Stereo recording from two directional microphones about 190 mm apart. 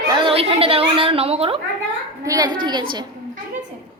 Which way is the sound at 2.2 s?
20° right (ahead or behind).